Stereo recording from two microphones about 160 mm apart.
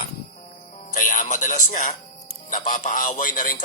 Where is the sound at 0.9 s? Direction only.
55° left (ahead or behind).